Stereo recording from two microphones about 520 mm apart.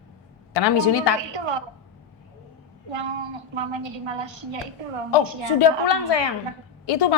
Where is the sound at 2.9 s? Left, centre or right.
Right.